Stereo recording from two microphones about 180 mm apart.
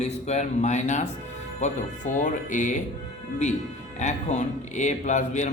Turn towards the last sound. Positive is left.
turn(degrees=40)  # may be behind; listen again after turning